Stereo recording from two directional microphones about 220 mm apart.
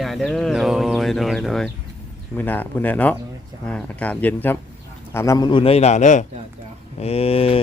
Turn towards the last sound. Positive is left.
turn(degrees=25)  # may be behind; listen again after turning